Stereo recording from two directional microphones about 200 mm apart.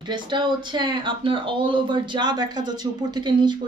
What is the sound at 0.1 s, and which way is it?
A woman's voice, 20° right (ahead or behind).